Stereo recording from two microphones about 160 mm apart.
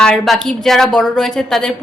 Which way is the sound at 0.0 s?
5° left (ahead or behind).